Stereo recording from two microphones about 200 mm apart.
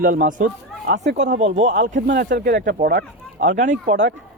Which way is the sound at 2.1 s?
55° right (ahead or behind).